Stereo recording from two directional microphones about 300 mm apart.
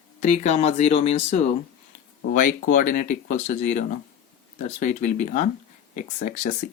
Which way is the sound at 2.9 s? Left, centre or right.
Left.